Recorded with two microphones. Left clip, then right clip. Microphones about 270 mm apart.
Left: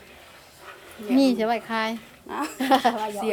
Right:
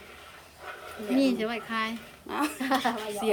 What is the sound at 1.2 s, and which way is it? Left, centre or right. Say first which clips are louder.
Speech: left 6 dB; left.